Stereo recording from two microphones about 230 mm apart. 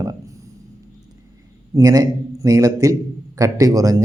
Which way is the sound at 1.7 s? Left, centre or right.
Centre.